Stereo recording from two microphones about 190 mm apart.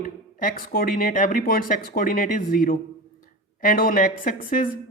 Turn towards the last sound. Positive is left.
turn(degrees=45)  # may be behind; listen again after turning